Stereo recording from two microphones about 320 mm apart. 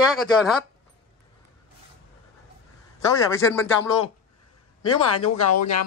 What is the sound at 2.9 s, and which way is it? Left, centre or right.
Speech, centre.